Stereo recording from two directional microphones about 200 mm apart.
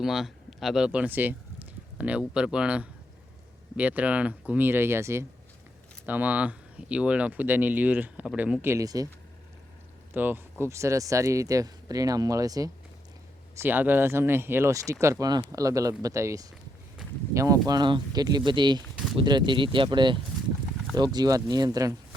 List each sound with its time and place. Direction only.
0.0 s speech: centre (ahead or behind); by 9.0 s 20° right (ahead or behind)
10.2 s speech: 10° right (ahead or behind)